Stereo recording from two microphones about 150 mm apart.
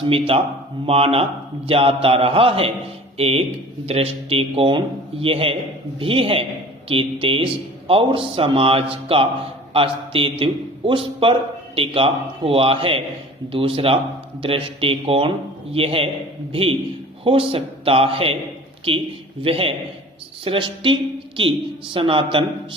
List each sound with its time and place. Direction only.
0.1 s a man's voice: 40° right (ahead or behind)
19.4 s a man's voice: 40° right (ahead or behind)